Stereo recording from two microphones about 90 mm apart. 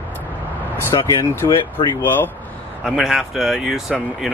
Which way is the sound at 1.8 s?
65° left (ahead or behind).